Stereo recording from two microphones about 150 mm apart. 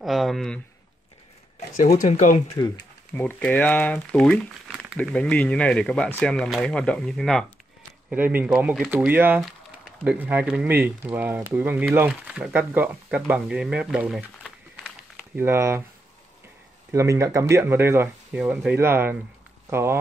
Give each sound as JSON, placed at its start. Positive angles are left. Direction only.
{"t": 0.0, "sound": "speech", "side_deg": 0}
{"t": 1.8, "sound": "speech", "side_deg": 60}
{"t": 2.5, "sound": "speech", "side_deg": 25}
{"t": 3.2, "sound": "speech", "side_deg": 10}
{"t": 8.1, "sound": "speech", "side_deg": -10}
{"t": 15.3, "sound": "speech", "side_deg": -15}
{"t": 16.9, "sound": "speech", "side_deg": -20}